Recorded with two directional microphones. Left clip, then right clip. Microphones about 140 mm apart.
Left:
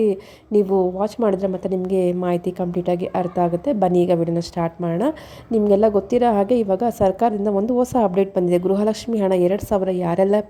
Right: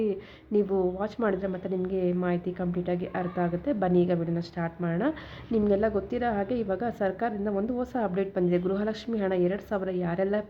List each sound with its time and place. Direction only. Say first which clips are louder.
0.0 s a woman's voice: left 10 dB; 40° left (ahead or behind)